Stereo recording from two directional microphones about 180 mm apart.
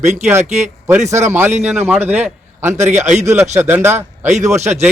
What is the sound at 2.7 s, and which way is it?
Speech, 40° right (ahead or behind).